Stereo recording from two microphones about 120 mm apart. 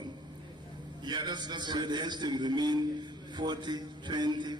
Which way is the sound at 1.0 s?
40° right (ahead or behind).